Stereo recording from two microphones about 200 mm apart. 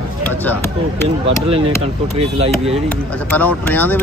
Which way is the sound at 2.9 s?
10° left (ahead or behind).